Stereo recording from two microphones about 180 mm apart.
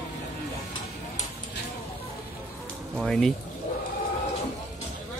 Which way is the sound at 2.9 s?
Centre (ahead or behind).